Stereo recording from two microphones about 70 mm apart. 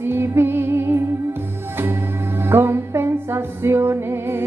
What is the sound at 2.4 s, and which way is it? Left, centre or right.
Music, right.